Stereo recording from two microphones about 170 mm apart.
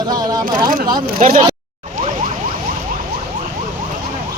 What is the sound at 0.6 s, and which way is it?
Speech, 60° right (ahead or behind).